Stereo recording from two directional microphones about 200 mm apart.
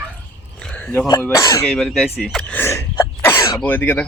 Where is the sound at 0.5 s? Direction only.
5° left (ahead or behind).